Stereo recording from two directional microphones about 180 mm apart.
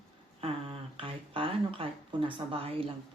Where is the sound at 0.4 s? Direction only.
30° right (ahead or behind).